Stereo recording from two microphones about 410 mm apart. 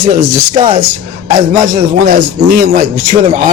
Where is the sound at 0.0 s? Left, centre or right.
Centre.